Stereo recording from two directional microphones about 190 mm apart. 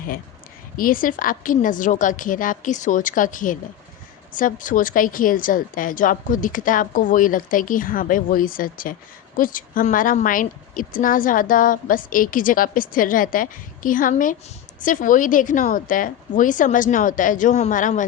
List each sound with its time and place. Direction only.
0.8 s a woman's voice: 45° left (ahead or behind)